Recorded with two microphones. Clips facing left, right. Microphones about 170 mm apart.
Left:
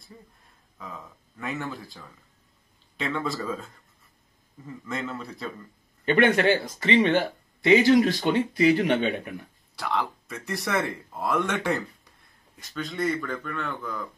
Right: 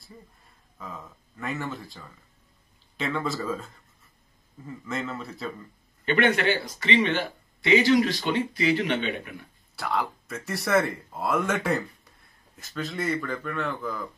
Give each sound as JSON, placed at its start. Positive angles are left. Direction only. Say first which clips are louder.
{"t": 0.7, "sound": "speech", "louder": "right 1 dB", "side_deg": 0}
{"t": 6.0, "sound": "a man's voice", "louder": "left 3 dB", "side_deg": 40}
{"t": 9.8, "sound": "speech", "louder": "even", "side_deg": 0}